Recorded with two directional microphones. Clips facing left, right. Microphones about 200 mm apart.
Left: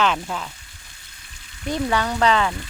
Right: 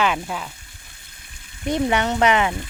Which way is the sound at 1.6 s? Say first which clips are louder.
Right 2 dB; 20° right (ahead or behind).